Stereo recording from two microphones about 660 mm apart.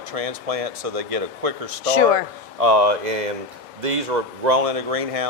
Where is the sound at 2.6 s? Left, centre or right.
Right.